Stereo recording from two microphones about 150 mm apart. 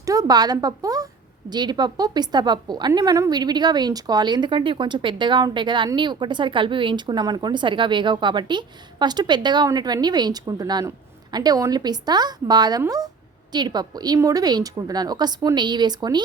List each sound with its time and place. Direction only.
0.0 s a woman's voice: 25° right (ahead or behind)